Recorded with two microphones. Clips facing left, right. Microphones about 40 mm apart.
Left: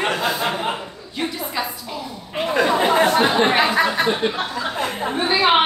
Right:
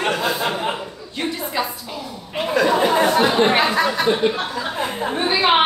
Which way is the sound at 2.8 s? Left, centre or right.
Centre.